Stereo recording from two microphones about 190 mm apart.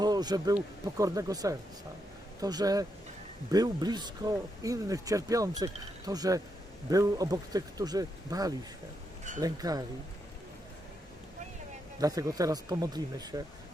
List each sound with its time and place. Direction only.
0.0 s a sound: 20° right (ahead or behind)
0.9 s speech: 15° right (ahead or behind)
11.9 s speech: 20° right (ahead or behind)